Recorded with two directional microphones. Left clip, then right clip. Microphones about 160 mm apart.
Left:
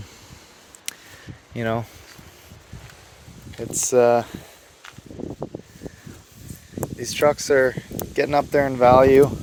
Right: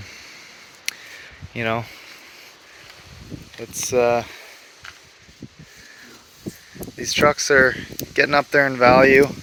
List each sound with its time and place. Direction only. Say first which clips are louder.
0.9 s a sound: right 6 dB; 40° left (ahead or behind)
1.5 s speech: right 2 dB; 25° left (ahead or behind)
3.8 s speech: left 2 dB; 45° left (ahead or behind)
7.0 s speech: right 2 dB; 25° left (ahead or behind)